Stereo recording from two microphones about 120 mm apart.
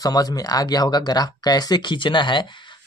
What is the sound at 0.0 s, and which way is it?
Speech, 30° left (ahead or behind).